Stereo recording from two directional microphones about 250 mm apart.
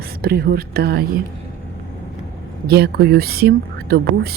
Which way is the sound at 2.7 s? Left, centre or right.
Right.